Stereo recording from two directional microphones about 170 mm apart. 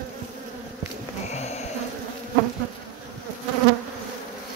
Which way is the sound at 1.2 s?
40° left (ahead or behind).